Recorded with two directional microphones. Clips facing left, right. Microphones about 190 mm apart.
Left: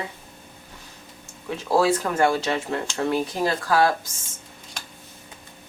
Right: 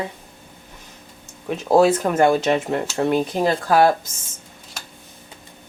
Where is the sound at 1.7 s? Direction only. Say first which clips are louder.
Right 5 dB; 20° right (ahead or behind).